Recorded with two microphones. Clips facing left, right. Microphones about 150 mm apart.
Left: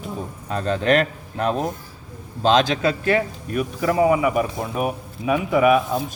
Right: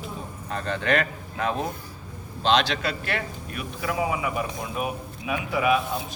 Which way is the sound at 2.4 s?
45° left (ahead or behind).